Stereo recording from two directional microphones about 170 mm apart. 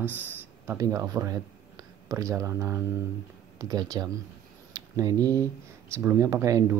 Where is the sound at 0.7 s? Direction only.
20° right (ahead or behind).